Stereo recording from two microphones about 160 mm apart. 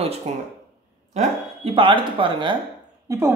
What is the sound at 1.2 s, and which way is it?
Speech, 35° right (ahead or behind).